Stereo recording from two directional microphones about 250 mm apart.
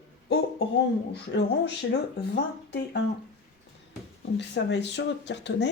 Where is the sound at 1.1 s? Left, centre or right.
Left.